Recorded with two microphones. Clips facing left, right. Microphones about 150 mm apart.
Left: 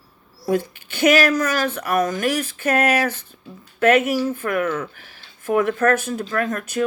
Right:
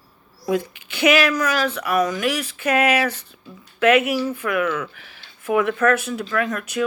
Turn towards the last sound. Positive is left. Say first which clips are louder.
# even
turn(degrees=45)  # may be behind; listen again after turning